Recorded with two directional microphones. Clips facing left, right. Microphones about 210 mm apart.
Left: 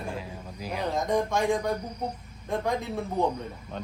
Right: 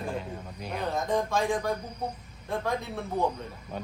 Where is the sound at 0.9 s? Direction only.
15° left (ahead or behind).